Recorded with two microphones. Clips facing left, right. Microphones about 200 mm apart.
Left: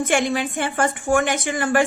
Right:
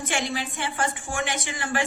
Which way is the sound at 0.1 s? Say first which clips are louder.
Left 5 dB; 50° left (ahead or behind).